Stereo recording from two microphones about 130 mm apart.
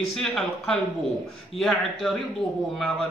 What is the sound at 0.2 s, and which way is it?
Speech, 5° left (ahead or behind).